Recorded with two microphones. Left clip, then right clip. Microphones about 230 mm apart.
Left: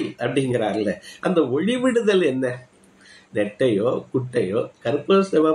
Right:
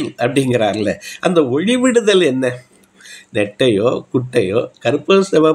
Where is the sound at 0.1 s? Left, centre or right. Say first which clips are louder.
Right 9 dB; right.